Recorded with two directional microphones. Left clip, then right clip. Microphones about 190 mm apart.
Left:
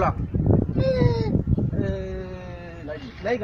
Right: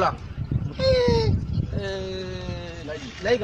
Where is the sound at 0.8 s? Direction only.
25° right (ahead or behind).